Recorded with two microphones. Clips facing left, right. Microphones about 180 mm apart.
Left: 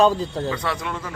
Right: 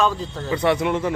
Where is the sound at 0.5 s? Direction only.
25° right (ahead or behind).